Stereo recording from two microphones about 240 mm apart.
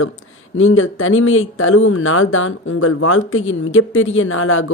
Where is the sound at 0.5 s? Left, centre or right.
Left.